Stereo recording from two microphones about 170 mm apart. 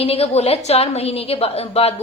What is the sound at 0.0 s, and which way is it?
A woman's voice, 35° left (ahead or behind).